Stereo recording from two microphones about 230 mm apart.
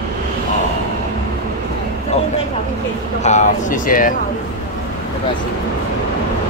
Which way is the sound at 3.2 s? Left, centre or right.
Left.